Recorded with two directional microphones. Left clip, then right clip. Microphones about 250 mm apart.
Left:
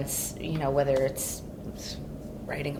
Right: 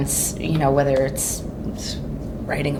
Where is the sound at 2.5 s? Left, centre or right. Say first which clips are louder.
Right 9 dB; left.